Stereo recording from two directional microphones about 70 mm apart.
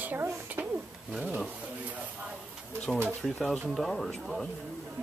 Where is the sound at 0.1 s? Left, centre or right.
Right.